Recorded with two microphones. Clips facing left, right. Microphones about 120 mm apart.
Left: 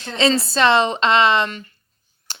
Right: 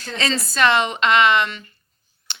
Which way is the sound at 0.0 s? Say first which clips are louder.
Left 6 dB; 25° left (ahead or behind).